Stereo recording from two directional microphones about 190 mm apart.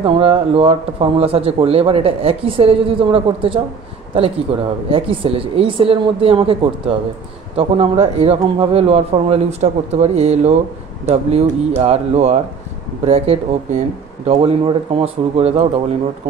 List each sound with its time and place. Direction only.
0.0 s speech: 30° right (ahead or behind)